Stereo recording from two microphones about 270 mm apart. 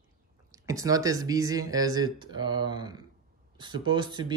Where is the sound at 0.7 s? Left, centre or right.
Centre.